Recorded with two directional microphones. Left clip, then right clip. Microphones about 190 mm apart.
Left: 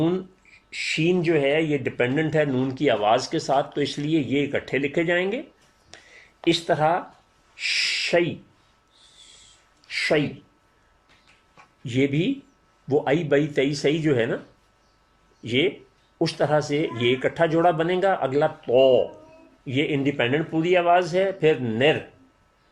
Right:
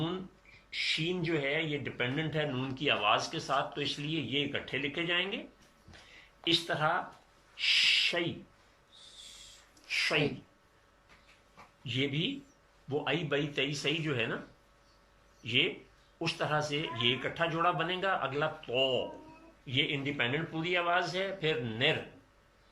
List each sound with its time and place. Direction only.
0.7 s speech: 45° left (ahead or behind)
6.4 s speech: 40° left (ahead or behind)
11.9 s speech: 45° left (ahead or behind)
15.4 s speech: 40° left (ahead or behind)